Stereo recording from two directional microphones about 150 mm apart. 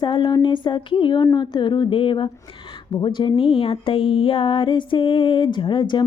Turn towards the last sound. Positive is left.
turn(degrees=30)  # may be behind; listen again after turning